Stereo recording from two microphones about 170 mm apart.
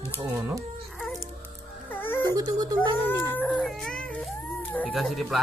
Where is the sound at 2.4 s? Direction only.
20° right (ahead or behind).